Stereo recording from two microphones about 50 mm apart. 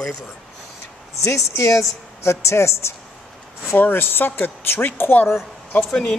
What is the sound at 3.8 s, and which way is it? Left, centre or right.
Speech, left.